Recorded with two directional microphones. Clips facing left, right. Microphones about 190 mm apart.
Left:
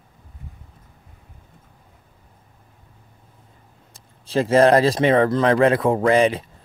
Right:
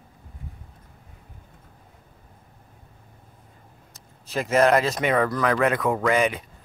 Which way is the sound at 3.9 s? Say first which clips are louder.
Left 7 dB; 30° left (ahead or behind).